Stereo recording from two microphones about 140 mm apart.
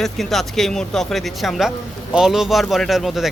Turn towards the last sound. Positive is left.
turn(degrees=0)  # may be behind; listen again after turning